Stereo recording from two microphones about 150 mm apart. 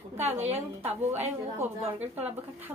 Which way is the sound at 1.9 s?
10° right (ahead or behind).